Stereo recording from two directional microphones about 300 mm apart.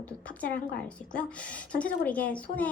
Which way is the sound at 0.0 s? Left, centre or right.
Centre.